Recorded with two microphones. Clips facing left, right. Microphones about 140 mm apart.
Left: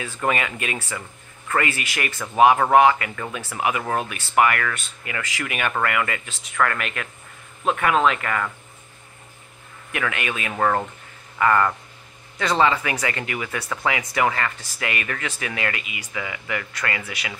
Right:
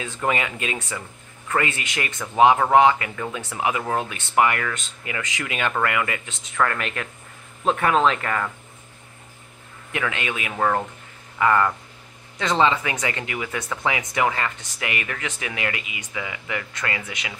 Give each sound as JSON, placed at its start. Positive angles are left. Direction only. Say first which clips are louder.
{"t": 0.0, "sound": "speech", "louder": "even", "side_deg": -20}
{"t": 9.9, "sound": "speech", "louder": "even", "side_deg": -25}
{"t": 10.6, "sound": "speech", "louder": "left 1 dB", "side_deg": -5}
{"t": 11.3, "sound": "speech", "louder": "even", "side_deg": -15}